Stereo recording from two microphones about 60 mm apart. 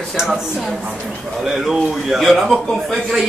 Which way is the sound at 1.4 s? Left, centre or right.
Centre.